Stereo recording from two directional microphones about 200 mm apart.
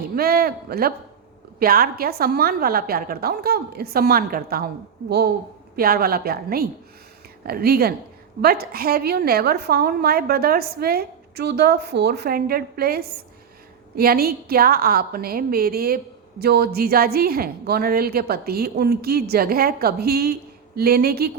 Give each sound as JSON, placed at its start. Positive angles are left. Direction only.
{"t": 0.2, "sound": "a man's voice", "side_deg": -50}